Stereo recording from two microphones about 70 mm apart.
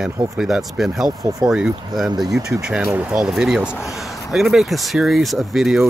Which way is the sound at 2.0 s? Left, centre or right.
Right.